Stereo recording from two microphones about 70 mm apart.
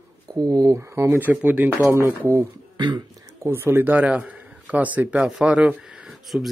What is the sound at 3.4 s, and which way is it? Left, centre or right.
A man's voice, right.